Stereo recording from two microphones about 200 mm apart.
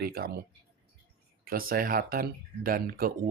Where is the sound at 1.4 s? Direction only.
45° right (ahead or behind).